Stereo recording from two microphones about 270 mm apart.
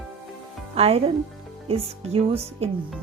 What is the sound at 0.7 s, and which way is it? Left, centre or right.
Speech, right.